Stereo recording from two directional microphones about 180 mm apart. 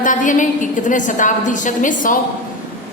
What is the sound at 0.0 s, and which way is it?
A woman's voice, 45° left (ahead or behind).